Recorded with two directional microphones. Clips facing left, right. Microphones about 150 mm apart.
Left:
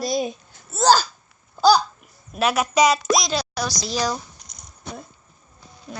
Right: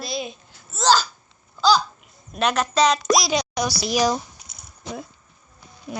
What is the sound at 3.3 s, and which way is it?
Speech, 15° right (ahead or behind).